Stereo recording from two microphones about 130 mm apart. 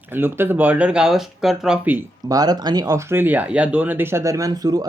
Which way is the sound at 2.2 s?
30° right (ahead or behind).